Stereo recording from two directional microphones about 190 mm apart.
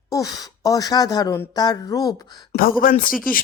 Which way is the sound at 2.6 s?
50° left (ahead or behind).